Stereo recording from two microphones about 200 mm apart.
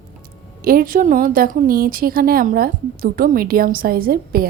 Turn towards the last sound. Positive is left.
turn(degrees=-45)  # may be behind; listen again after turning